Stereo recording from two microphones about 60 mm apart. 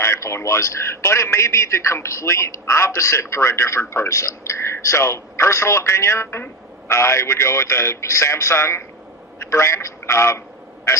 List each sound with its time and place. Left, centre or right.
0.0 s a man's voice: left
10.9 s quack: left